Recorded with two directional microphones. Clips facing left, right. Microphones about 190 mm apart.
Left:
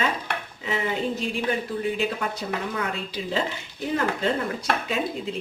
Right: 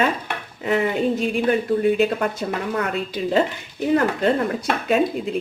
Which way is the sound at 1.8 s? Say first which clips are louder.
Right 8 dB; 55° right (ahead or behind).